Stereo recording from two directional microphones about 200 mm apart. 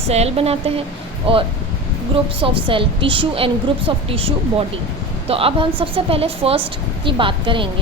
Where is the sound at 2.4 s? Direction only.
25° right (ahead or behind).